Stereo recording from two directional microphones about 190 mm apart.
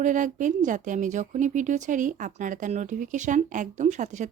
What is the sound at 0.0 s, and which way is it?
A woman's voice, 40° right (ahead or behind).